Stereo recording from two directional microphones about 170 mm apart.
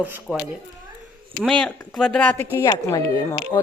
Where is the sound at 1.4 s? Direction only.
5° left (ahead or behind).